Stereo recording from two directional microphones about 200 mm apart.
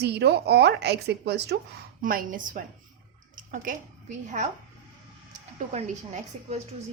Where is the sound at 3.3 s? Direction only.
40° right (ahead or behind).